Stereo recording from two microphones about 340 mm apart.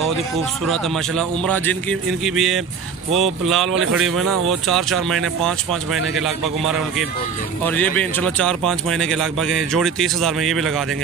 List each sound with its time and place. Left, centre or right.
0.7 s speech: centre
3.7 s speech: right
4.5 s speech: centre